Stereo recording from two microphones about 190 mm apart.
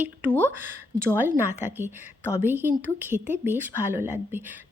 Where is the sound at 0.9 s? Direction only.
10° right (ahead or behind).